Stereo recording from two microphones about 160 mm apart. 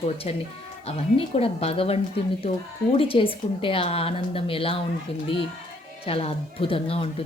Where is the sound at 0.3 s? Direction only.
40° left (ahead or behind).